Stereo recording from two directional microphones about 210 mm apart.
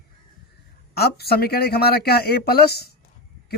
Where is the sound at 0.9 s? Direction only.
50° left (ahead or behind).